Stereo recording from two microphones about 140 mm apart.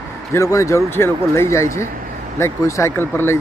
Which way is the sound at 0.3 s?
20° left (ahead or behind).